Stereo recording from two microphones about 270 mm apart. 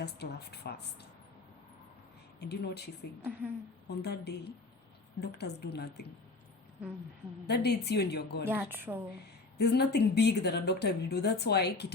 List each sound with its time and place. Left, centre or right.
0.0 s speech: left
2.4 s speech: left
7.4 s speech: left
8.4 s a woman's voice: centre
9.6 s speech: left